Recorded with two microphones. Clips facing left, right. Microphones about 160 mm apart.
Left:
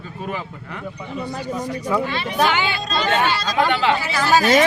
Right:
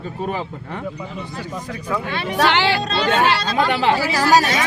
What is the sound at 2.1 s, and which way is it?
Speech, 65° right (ahead or behind).